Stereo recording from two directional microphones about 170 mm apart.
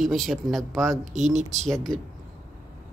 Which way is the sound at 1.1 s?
40° right (ahead or behind).